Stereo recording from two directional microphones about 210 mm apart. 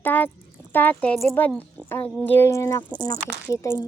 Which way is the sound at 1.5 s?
10° right (ahead or behind).